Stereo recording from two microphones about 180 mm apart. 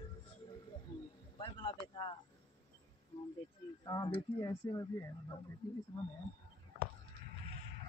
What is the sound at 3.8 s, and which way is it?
Speech, 20° left (ahead or behind).